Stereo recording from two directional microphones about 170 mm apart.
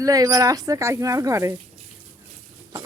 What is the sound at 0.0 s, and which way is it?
Speech, 20° right (ahead or behind).